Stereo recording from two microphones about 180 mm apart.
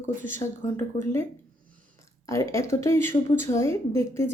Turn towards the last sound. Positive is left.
turn(degrees=15)  # may be behind; listen again after turning